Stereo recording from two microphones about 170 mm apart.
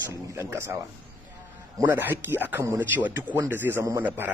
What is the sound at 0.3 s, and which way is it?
Speech, 15° right (ahead or behind).